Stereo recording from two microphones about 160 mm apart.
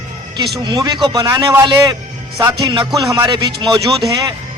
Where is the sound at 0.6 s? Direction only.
25° right (ahead or behind).